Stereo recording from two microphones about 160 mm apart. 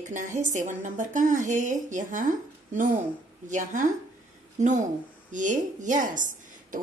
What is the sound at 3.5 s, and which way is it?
A woman's voice, 50° right (ahead or behind).